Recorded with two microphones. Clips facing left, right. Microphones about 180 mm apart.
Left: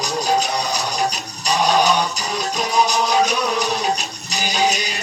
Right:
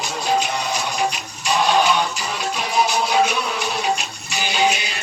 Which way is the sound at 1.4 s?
40° left (ahead or behind).